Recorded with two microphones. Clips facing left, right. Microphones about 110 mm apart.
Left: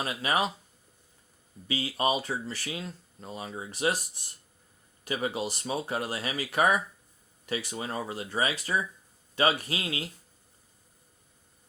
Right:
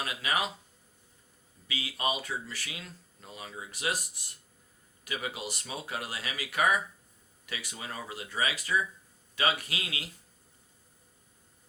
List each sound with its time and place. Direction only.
0.0 s speech: 35° left (ahead or behind)
1.6 s speech: 35° left (ahead or behind)
5.0 s speech: 35° left (ahead or behind)